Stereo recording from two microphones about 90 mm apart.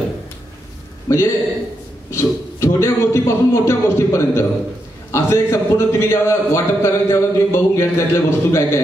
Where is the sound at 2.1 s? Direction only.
30° left (ahead or behind).